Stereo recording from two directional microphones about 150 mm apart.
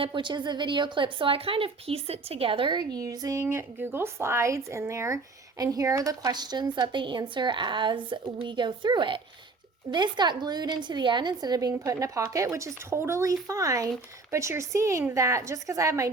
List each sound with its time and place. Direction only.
0.0 s speech: 30° right (ahead or behind)